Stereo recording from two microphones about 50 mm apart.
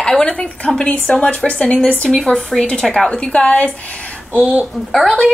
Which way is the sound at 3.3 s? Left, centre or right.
Left.